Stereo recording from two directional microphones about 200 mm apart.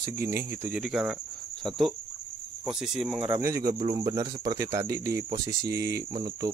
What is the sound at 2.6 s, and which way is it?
Speech, centre (ahead or behind).